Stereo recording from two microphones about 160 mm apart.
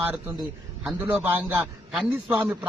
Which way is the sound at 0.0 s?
10° right (ahead or behind).